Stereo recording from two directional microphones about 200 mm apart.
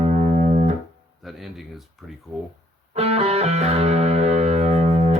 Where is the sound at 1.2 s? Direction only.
Centre (ahead or behind).